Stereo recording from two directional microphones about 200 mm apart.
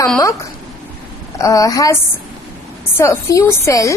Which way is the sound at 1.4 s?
15° left (ahead or behind).